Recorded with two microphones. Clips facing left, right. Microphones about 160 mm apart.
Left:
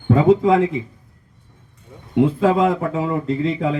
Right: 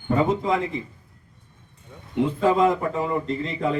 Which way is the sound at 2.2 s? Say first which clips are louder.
Left 4 dB; 90° left.